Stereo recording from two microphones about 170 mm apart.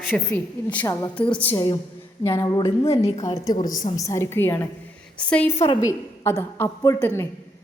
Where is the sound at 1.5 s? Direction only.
20° left (ahead or behind).